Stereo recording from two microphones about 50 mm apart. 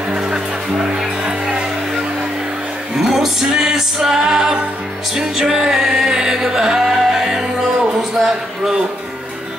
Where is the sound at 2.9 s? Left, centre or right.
Centre.